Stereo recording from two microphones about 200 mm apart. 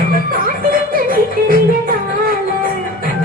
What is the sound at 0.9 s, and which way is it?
Music, 45° right (ahead or behind).